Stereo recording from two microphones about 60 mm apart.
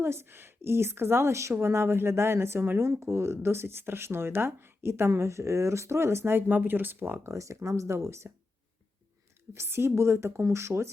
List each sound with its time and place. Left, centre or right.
0.0 s speech: right
6.5 s speech: right
7.3 s speech: right
9.6 s speech: right